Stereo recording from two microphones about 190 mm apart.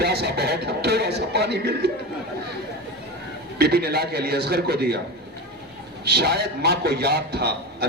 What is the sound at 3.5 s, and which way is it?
A man's voice, 55° right (ahead or behind).